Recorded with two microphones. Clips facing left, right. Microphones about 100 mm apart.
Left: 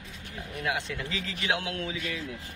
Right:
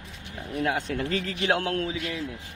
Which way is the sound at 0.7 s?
45° right (ahead or behind).